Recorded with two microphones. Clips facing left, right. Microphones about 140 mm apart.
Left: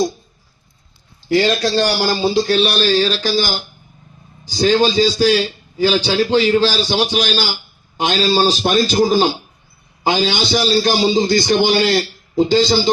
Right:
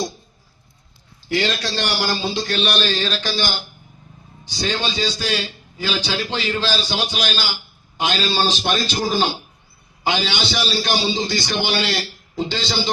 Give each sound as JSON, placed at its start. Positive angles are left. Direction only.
{"t": 1.3, "sound": "a man's voice", "side_deg": 40}